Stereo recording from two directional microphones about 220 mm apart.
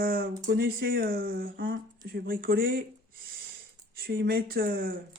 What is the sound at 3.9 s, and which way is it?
Speech, 45° right (ahead or behind).